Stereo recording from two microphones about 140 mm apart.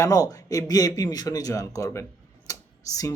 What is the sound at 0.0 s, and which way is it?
Speech, 25° left (ahead or behind).